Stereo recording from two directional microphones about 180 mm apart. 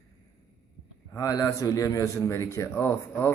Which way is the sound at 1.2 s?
20° left (ahead or behind).